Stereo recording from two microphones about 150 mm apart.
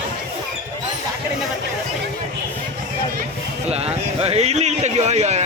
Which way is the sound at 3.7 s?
45° right (ahead or behind).